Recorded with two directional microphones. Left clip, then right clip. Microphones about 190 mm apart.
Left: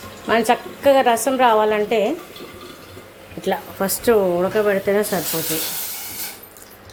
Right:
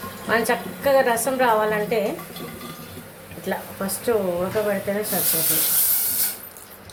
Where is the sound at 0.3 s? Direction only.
35° left (ahead or behind).